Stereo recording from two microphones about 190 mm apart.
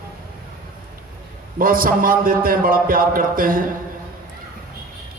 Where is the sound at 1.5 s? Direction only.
50° right (ahead or behind).